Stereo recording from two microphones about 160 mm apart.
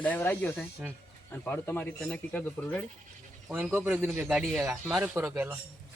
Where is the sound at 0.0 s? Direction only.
10° left (ahead or behind).